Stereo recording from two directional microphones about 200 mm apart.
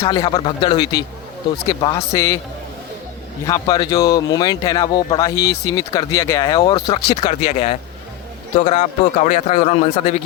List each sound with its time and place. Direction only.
0.0 s a man's voice: 25° left (ahead or behind)
3.4 s a man's voice: 20° left (ahead or behind)